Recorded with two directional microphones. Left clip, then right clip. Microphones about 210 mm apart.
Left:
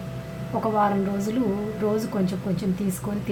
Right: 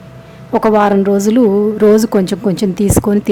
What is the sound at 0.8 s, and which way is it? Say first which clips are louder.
Speech: right 12 dB; 55° right (ahead or behind).